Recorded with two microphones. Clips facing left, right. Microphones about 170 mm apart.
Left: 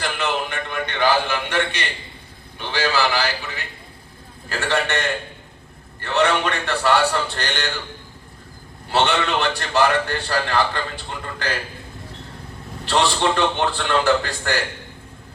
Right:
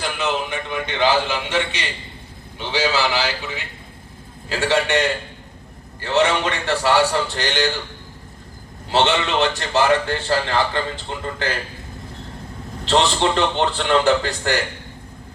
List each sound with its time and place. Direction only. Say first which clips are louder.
0.1 s a sound: right 1 dB; 10° right (ahead or behind)
2.6 s a man's voice: right 1 dB; 15° right (ahead or behind)
6.1 s a man's voice: right 1 dB; 20° right (ahead or behind)
8.9 s a man's voice: right 1 dB; 20° right (ahead or behind)
12.8 s a man's voice: right 2 dB; 20° right (ahead or behind)